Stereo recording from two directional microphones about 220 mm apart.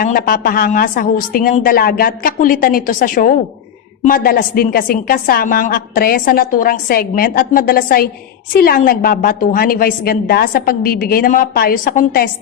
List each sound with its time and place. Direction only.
0.0 s a woman's voice: 40° left (ahead or behind)